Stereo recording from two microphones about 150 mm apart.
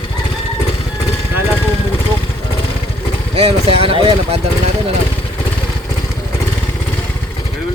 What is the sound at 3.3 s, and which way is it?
Speech, 40° right (ahead or behind).